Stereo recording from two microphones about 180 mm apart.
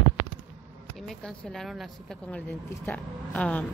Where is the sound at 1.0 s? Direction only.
5° left (ahead or behind).